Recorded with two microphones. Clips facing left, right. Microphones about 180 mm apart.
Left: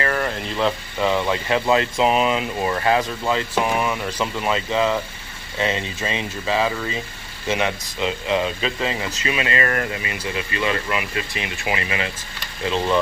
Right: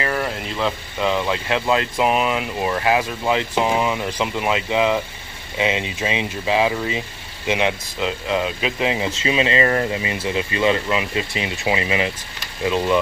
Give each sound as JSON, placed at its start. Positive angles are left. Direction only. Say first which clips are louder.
{"t": 0.0, "sound": "speech", "louder": "even", "side_deg": -10}
{"t": 8.0, "sound": "speech", "louder": "even", "side_deg": 0}